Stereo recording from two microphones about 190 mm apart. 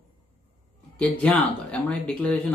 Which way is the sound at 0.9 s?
5° left (ahead or behind).